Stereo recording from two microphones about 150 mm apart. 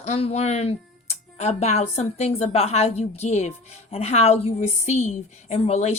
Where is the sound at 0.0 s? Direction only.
45° left (ahead or behind).